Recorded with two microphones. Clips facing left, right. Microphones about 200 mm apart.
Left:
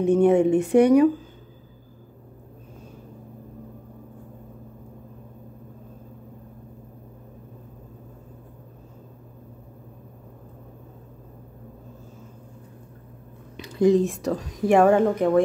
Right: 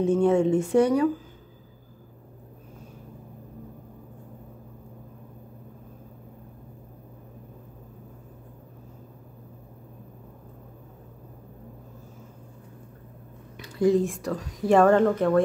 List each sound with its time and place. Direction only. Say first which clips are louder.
0.0 s speech: left 3 dB; 15° left (ahead or behind)
13.6 s speech: left 3 dB; 20° left (ahead or behind)